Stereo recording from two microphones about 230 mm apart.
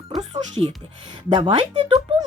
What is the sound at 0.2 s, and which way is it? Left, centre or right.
Music, centre.